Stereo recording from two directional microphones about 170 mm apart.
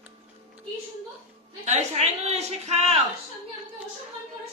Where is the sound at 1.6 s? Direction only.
45° right (ahead or behind).